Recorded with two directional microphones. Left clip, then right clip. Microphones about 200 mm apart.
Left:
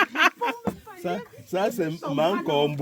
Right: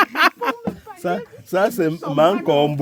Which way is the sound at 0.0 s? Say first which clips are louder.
Right 5 dB; 30° right (ahead or behind).